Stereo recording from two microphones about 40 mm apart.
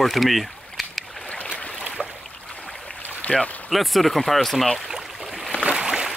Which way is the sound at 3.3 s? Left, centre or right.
Left.